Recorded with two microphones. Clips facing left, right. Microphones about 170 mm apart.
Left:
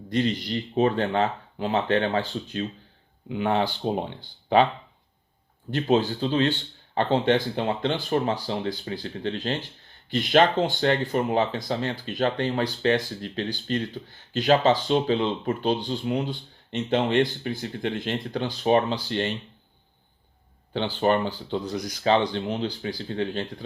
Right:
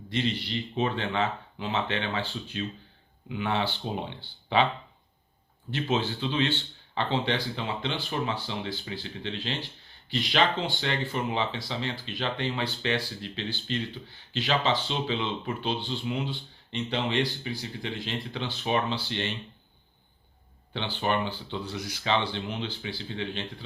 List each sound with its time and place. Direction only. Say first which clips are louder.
0.1 s speech: left 5 dB; 45° left (ahead or behind)
5.7 s speech: left 6 dB; 45° left (ahead or behind)
20.7 s speech: left 6 dB; 40° left (ahead or behind)